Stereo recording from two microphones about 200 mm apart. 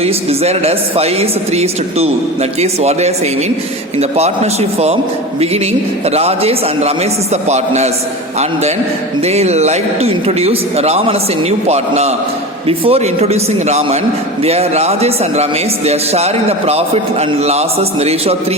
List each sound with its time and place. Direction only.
0.0 s speech: 30° right (ahead or behind)
6.1 s speech: 30° right (ahead or behind)
9.2 s speech: 30° right (ahead or behind)